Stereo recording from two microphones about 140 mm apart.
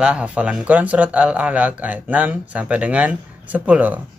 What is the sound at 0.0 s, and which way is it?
Mantra, 10° right (ahead or behind).